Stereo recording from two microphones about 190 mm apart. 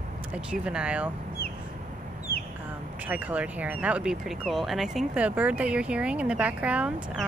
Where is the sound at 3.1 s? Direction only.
10° right (ahead or behind).